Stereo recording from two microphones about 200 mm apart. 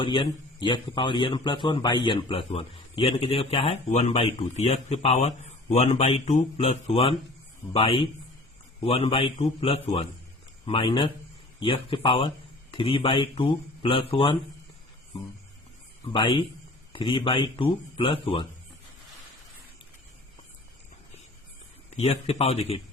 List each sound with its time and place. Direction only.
0.0 s a man's voice: 25° left (ahead or behind)
16.1 s a man's voice: 25° left (ahead or behind)
21.8 s a man's voice: 30° left (ahead or behind)